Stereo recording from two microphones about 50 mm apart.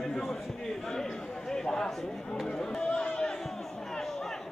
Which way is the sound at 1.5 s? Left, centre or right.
Centre.